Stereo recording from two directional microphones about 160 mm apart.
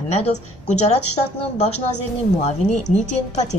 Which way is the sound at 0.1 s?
45° left (ahead or behind).